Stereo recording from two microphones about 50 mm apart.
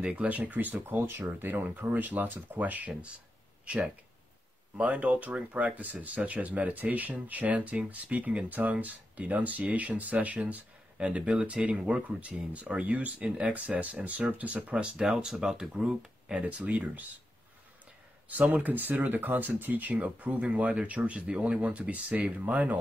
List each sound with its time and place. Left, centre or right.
0.1 s speech: right
11.0 s speech: centre
15.0 s speech: centre
16.4 s speech: right
18.5 s speech: right